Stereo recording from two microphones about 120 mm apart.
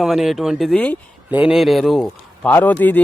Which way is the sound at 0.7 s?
10° left (ahead or behind).